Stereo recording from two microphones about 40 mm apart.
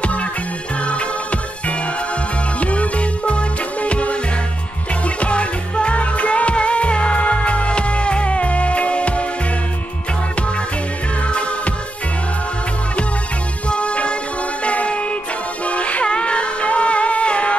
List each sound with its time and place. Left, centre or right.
0.0 s music: left
2.6 s music: left
11.2 s music: left
13.7 s music: left